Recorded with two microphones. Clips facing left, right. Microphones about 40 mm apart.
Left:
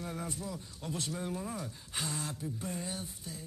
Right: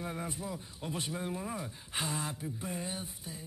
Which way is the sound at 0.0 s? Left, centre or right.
Right.